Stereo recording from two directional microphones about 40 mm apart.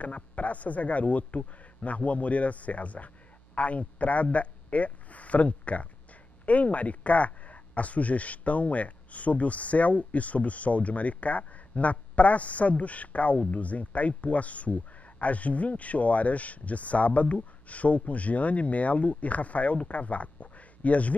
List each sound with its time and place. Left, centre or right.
0.0 s speech: left